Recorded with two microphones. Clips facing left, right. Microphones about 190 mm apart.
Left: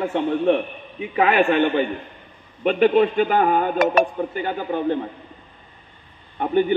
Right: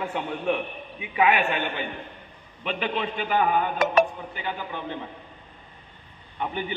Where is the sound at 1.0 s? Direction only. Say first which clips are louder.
Left 5 dB; 40° left (ahead or behind).